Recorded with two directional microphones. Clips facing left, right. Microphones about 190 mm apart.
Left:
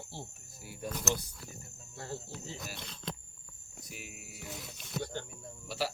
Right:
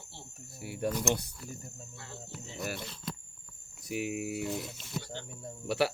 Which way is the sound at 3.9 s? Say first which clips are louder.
Right 17 dB; 65° right (ahead or behind).